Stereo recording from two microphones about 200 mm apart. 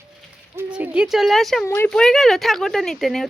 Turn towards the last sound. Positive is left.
turn(degrees=0)  # may be behind; listen again after turning